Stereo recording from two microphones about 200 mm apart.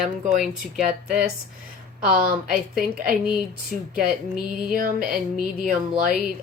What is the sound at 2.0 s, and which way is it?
A woman's voice, 45° right (ahead or behind).